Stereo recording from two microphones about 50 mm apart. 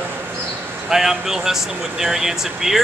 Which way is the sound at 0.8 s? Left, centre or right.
Centre.